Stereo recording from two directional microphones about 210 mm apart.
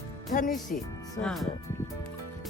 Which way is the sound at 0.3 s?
40° left (ahead or behind).